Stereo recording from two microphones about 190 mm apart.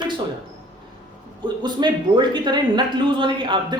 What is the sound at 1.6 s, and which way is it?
Speech, 25° right (ahead or behind).